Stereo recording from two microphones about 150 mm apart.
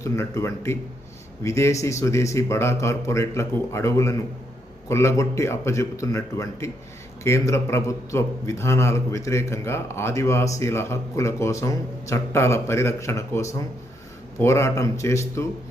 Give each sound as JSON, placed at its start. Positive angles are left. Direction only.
{"t": 0.0, "sound": "a man's voice", "side_deg": 20}